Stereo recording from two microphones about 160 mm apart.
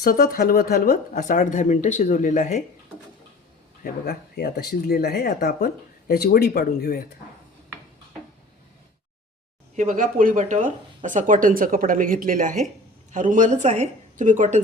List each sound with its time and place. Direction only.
0.0 s speech: 65° left (ahead or behind)
3.8 s speech: 80° left
9.7 s a woman's voice: 50° right (ahead or behind)